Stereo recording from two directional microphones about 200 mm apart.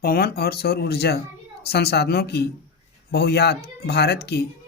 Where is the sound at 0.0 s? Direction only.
50° left (ahead or behind).